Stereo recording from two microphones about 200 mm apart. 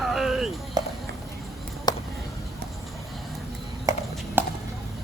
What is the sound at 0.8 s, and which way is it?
Clip-clop, 20° right (ahead or behind).